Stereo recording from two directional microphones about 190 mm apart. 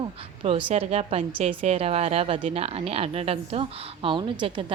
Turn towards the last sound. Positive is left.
turn(degrees=-25)  # may be behind; listen again after turning